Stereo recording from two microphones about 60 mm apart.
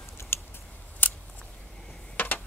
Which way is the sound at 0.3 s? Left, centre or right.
Left.